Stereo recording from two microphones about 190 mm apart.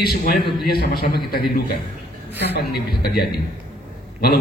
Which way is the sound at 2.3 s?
60° left (ahead or behind).